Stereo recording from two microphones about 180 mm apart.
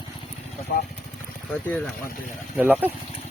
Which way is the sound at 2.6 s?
10° right (ahead or behind).